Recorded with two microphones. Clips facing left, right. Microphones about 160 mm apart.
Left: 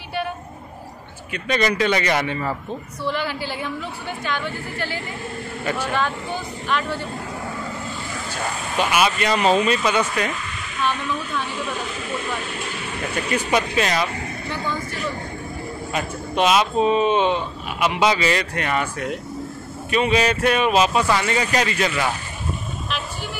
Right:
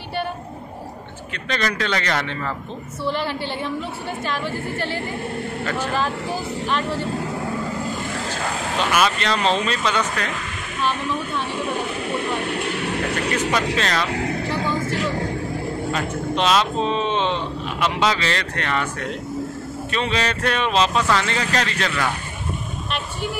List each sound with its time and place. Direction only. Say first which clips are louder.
1.3 s speech: left 4 dB; 10° left (ahead or behind)
3.1 s speech: right 1 dB; 30° right (ahead or behind)
8.7 s speech: left 1 dB; 10° left (ahead or behind)
10.8 s speech: right 1 dB; 30° right (ahead or behind)
12.4 s speech: right 6 dB; 65° right (ahead or behind)
13.7 s speech: left 2 dB; 10° left (ahead or behind)
14.0 s vehicle: right 4 dB; 90° right
14.9 s speech: right 5 dB; 90° right
15.9 s speech: even; 10° left (ahead or behind)